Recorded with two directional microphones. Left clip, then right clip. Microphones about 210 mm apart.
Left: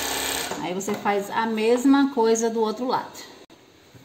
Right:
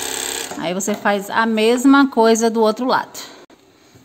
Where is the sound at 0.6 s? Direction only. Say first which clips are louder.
Right 9 dB; 55° right (ahead or behind).